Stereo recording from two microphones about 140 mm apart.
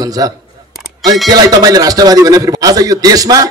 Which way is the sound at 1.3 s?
25° right (ahead or behind).